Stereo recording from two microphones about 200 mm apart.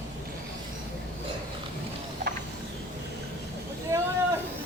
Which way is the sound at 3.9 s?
15° right (ahead or behind).